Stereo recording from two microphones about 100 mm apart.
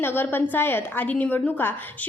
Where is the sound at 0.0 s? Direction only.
20° left (ahead or behind).